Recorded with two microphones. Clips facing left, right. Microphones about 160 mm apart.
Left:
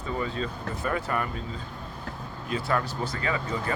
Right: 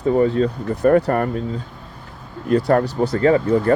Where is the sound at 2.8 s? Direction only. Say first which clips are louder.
Right 14 dB; 70° right (ahead or behind); by 3.6 s 55° right (ahead or behind).